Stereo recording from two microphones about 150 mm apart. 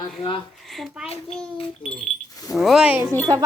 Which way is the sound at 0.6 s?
Centre (ahead or behind).